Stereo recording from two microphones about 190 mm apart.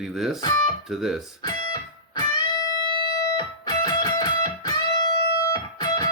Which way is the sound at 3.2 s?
20° left (ahead or behind).